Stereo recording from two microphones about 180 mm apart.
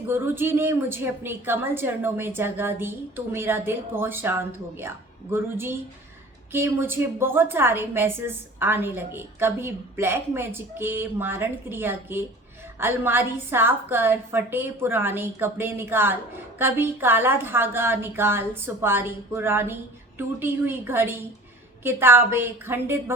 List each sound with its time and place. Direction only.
0.1 s a woman's voice: 10° right (ahead or behind)